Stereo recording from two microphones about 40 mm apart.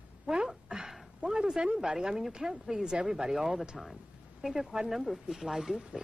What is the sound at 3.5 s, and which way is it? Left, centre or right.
A woman's voice, centre.